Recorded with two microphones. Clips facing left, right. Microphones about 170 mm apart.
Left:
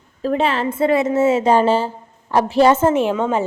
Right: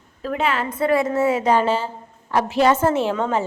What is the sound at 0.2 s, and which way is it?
A woman's voice, 30° left (ahead or behind).